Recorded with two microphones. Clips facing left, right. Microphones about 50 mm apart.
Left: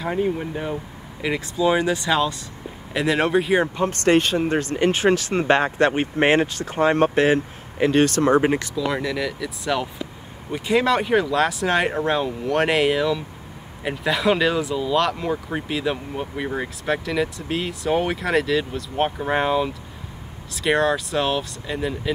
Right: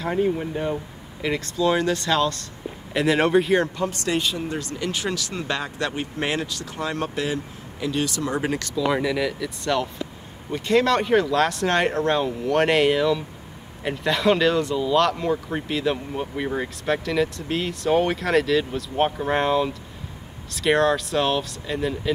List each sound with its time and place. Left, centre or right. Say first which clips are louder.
0.0 s speech: even; centre
3.9 s speech: left 7 dB; left
8.4 s speech: left 6 dB; left
8.7 s speech: right 2 dB; centre